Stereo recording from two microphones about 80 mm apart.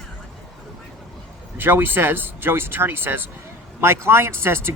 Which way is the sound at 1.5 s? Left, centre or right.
Right.